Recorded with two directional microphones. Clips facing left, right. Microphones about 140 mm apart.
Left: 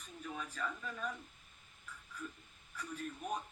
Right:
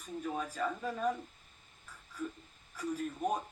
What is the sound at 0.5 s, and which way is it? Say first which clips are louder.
Speech: right 7 dB; 35° right (ahead or behind).